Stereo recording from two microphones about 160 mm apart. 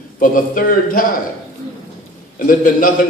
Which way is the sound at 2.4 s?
60° left (ahead or behind).